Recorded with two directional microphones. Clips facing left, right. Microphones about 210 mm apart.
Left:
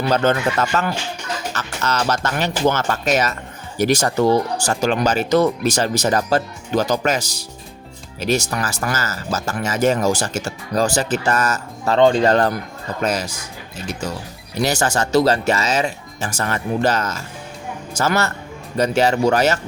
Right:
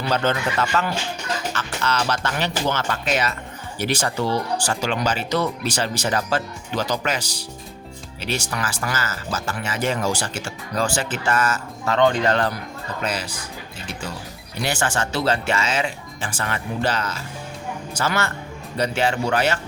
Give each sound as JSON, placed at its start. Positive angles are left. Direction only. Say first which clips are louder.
{"t": 0.1, "sound": "speech", "louder": "left 4 dB", "side_deg": 45}
{"t": 14.5, "sound": "speech", "louder": "left 5 dB", "side_deg": 40}